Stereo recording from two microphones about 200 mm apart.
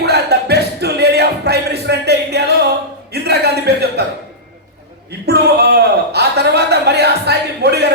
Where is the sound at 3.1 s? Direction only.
55° right (ahead or behind).